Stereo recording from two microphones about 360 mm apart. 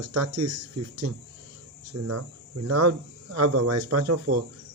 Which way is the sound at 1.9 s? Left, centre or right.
Right.